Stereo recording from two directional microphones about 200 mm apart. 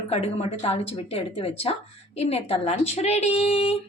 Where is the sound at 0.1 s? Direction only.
30° left (ahead or behind).